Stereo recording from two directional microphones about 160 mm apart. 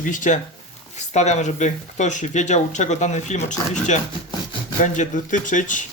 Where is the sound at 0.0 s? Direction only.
55° left (ahead or behind).